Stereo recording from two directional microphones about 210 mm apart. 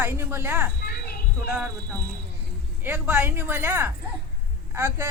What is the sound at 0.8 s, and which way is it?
Children playing, 50° left (ahead or behind).